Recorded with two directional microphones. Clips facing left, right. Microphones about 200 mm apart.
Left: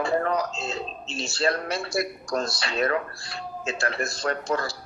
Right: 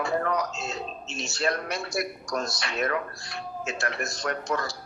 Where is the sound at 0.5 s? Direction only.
30° left (ahead or behind).